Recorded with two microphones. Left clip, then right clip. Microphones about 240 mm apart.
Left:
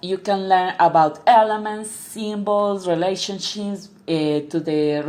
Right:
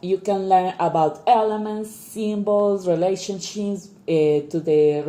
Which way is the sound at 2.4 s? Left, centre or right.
Left.